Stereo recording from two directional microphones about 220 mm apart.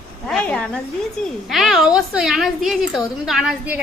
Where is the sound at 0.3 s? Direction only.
5° left (ahead or behind).